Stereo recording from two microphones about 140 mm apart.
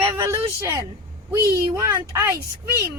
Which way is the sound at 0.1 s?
20° right (ahead or behind).